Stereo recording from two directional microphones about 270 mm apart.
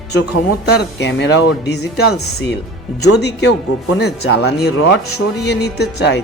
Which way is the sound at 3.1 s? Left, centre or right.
Left.